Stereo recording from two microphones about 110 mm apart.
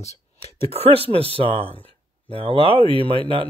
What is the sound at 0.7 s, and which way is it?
Speech, 60° right (ahead or behind).